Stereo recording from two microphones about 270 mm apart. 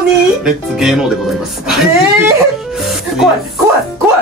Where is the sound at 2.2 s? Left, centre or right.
Centre.